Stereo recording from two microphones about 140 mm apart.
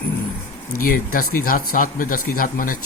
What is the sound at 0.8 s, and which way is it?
Speech, 90° left.